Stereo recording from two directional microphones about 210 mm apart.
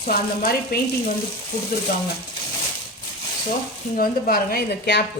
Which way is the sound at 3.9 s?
45° left (ahead or behind).